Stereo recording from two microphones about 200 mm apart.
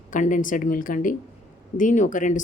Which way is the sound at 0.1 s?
40° left (ahead or behind).